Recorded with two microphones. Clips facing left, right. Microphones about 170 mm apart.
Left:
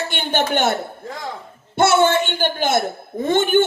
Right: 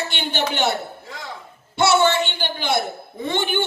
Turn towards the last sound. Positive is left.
turn(degrees=50)  # may be behind; listen again after turning